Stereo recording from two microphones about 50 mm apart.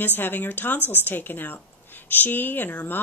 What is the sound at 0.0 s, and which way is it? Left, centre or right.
Speech, left.